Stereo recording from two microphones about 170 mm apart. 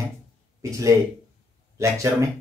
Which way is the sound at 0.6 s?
20° right (ahead or behind).